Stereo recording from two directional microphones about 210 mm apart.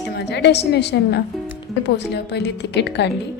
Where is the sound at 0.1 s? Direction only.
50° left (ahead or behind).